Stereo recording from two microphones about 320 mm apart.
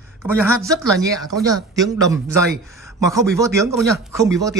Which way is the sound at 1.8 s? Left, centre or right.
Centre.